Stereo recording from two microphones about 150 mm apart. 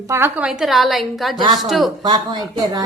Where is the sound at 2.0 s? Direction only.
30° right (ahead or behind).